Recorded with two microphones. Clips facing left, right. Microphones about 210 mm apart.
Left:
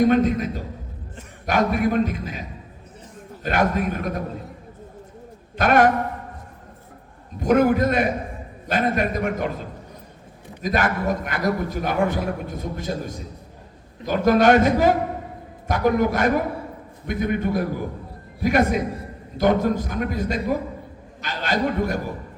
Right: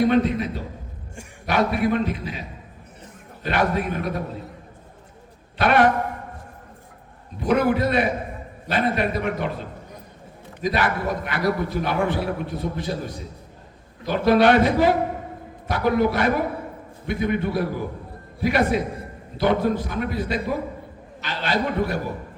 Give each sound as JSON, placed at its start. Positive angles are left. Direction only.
{"t": 0.1, "sound": "a man's voice", "side_deg": 45}
{"t": 3.4, "sound": "a man's voice", "side_deg": 45}
{"t": 5.5, "sound": "a man's voice", "side_deg": 45}
{"t": 7.3, "sound": "a man's voice", "side_deg": 45}
{"t": 10.6, "sound": "a man's voice", "side_deg": 45}